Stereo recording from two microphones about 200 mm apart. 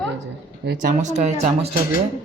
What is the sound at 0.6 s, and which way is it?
Speech, 40° right (ahead or behind).